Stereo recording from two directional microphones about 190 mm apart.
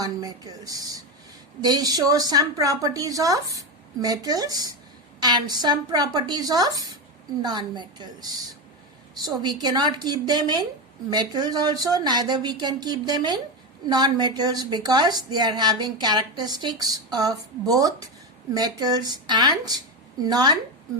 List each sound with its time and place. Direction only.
0.0 s a woman's voice: 20° right (ahead or behind)